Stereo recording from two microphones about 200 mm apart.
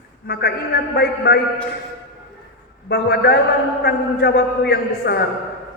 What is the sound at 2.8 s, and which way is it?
A man's voice, 55° left (ahead or behind).